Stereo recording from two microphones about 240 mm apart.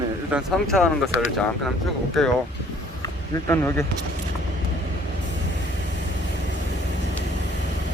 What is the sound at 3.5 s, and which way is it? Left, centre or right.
Speech, centre.